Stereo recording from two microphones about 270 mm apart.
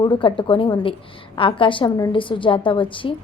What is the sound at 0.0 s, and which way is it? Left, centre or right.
A woman's voice, centre.